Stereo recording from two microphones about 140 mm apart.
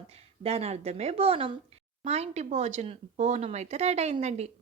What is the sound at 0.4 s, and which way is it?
Speech, 45° right (ahead or behind).